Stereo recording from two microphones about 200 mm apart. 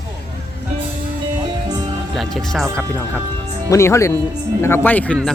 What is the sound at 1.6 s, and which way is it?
Music, 20° right (ahead or behind).